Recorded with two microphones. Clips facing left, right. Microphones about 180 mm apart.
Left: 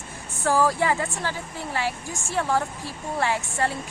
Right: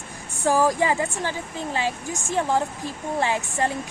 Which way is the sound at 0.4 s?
15° right (ahead or behind).